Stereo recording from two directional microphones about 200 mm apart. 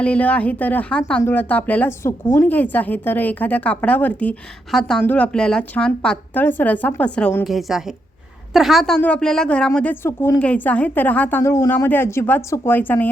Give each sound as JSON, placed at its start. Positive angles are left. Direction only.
{"t": 0.0, "sound": "speech", "side_deg": 5}